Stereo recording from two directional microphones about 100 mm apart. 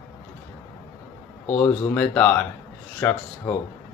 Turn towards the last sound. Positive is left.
turn(degrees=20)  # may be behind; listen again after turning